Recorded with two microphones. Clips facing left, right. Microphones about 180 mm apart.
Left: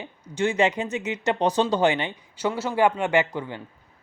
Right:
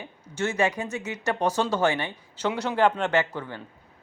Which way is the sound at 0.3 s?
15° left (ahead or behind).